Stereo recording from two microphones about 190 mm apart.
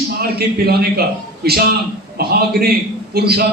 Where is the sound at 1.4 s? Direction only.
55° right (ahead or behind).